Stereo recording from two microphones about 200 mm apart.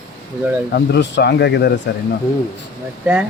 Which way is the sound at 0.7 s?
55° left (ahead or behind).